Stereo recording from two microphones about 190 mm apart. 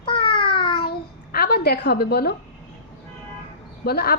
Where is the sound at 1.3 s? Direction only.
55° left (ahead or behind).